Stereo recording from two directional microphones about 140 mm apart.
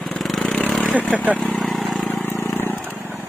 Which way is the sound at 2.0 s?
15° left (ahead or behind).